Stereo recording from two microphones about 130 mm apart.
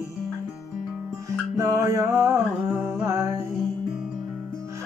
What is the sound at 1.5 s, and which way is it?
Music, 25° right (ahead or behind).